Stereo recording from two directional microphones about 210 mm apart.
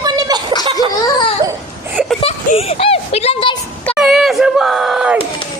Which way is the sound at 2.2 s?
30° left (ahead or behind).